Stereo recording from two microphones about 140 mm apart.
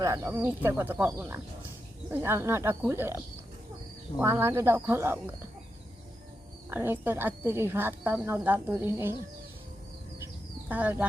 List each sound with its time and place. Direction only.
0.0 s a woman's voice: 20° right (ahead or behind)
4.2 s a woman's voice: 15° right (ahead or behind)
6.7 s a woman's voice: 15° right (ahead or behind)
10.7 s a woman's voice: 10° right (ahead or behind)